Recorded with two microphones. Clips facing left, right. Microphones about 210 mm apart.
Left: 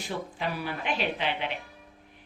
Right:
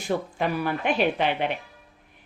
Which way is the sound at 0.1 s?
50° right (ahead or behind).